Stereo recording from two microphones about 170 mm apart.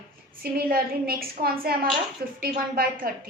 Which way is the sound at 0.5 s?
60° right (ahead or behind).